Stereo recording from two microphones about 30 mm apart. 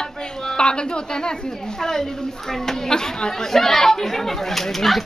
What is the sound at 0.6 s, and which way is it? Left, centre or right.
A woman's voice, left.